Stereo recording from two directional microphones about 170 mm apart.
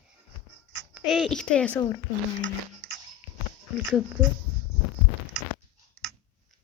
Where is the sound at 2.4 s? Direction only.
90° right.